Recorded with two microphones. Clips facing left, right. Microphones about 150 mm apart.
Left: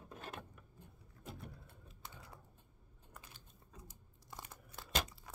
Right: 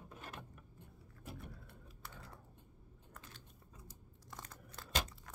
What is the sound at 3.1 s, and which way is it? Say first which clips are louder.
Biting: right 1 dB; 15° left (ahead or behind).